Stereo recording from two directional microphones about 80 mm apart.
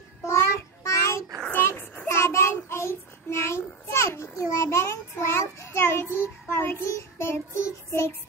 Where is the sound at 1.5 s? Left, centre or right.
Left.